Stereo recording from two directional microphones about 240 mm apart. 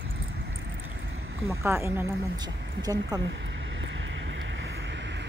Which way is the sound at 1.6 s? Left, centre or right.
Centre.